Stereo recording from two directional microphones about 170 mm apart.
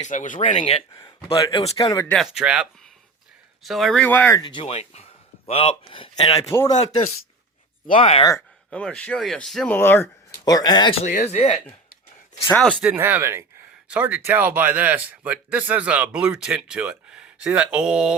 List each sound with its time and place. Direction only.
0.0 s speech: 50° left (ahead or behind)
0.4 s speech: 35° left (ahead or behind)
2.1 s speech: 5° right (ahead or behind)
4.4 s speech: 30° left (ahead or behind)
7.9 s speech: 35° left (ahead or behind)
8.3 s speech: 10° left (ahead or behind)
9.7 s speech: 15° left (ahead or behind)
11.0 s speech: 45° left (ahead or behind)
12.5 s speech: 5° left (ahead or behind)
12.8 s a man's voice: 10° right (ahead or behind)